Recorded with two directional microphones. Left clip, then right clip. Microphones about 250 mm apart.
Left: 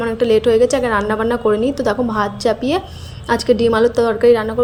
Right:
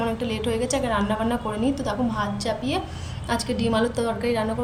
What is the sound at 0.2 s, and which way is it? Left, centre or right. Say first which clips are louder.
A woman's voice: left 14 dB; centre.